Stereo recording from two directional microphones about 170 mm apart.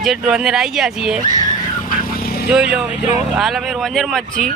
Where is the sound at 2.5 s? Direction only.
5° right (ahead or behind).